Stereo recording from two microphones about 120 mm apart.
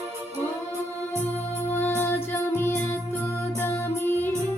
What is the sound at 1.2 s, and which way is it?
Music, 15° left (ahead or behind).